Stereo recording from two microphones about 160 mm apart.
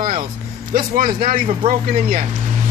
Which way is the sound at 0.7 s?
60° right (ahead or behind).